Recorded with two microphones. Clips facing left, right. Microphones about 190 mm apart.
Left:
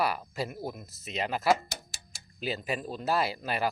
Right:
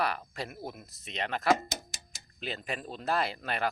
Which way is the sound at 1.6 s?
20° right (ahead or behind).